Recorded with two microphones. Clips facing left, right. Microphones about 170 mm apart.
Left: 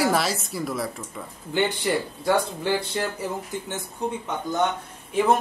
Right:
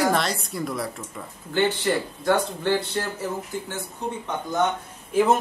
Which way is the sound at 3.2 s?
20° left (ahead or behind).